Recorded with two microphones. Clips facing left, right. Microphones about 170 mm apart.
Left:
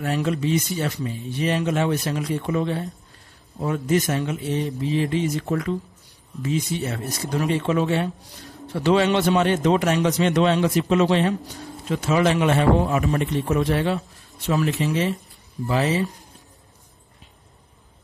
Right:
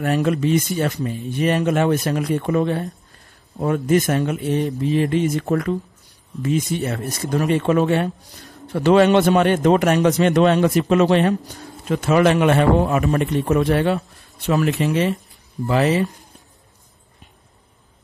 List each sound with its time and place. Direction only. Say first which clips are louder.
0.0 s a man's voice: right 4 dB; 55° right (ahead or behind)